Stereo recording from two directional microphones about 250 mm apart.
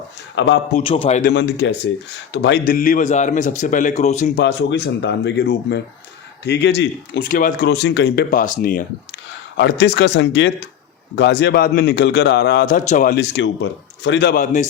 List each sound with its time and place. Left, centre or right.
0.3 s speech: left
0.7 s a man's voice: left
1.3 s speech: left
4.4 s speech: left